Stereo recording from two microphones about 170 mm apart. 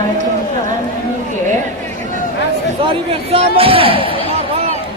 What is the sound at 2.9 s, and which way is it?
Speech, 35° right (ahead or behind).